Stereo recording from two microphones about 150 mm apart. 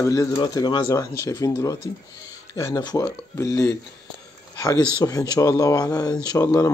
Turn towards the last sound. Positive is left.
turn(degrees=20)  # may be behind; listen again after turning